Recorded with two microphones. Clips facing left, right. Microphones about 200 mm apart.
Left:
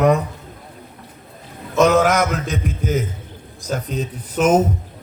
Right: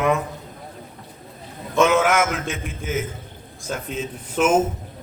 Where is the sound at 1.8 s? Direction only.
40° left (ahead or behind).